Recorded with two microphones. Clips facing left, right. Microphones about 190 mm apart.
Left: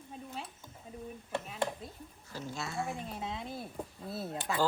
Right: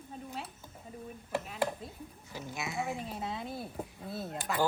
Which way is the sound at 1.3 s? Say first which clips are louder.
Right 2 dB; 5° right (ahead or behind).